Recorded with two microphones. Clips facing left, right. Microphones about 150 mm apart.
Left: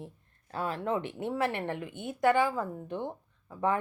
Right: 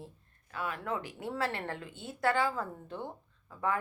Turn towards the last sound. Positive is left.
turn(degrees=20)  # may be behind; listen again after turning